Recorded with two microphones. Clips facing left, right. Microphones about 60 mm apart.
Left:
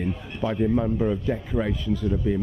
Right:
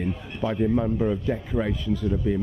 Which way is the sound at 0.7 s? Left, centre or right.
Centre.